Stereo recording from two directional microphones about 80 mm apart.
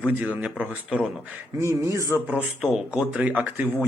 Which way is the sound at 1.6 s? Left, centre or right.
Right.